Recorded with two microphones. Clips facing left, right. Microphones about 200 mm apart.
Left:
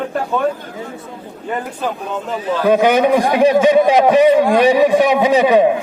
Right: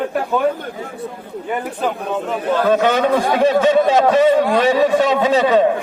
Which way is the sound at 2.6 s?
15° left (ahead or behind).